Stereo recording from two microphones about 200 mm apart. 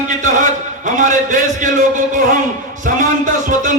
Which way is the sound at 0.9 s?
40° right (ahead or behind).